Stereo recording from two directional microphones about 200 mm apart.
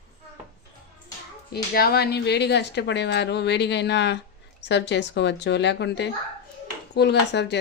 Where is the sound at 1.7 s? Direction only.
50° left (ahead or behind).